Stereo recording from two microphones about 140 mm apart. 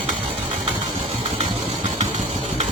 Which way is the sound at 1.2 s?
45° right (ahead or behind).